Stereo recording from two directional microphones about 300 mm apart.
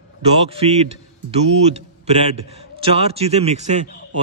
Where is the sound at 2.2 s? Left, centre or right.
Centre.